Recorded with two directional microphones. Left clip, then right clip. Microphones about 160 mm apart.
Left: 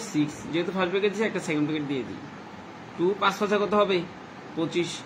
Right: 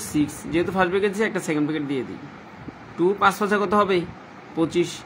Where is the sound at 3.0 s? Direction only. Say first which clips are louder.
Right 5 dB; 90° right.